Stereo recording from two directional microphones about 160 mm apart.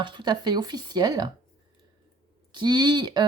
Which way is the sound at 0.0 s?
30° right (ahead or behind).